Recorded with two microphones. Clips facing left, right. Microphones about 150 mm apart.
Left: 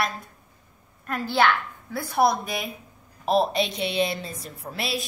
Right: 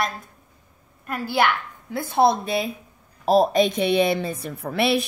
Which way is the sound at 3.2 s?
45° right (ahead or behind).